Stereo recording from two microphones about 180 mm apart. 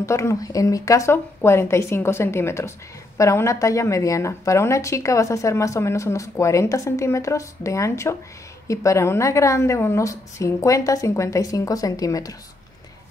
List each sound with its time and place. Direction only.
0.0 s speech: 15° left (ahead or behind)